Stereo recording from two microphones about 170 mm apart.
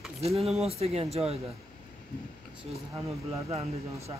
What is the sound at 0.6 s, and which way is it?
Speech, 35° right (ahead or behind).